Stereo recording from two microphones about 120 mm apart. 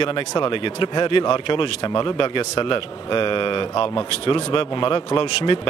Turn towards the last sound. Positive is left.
turn(degrees=40)  # may be behind; listen again after turning